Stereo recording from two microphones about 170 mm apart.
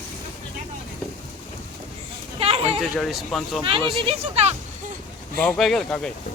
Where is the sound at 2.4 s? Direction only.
35° right (ahead or behind).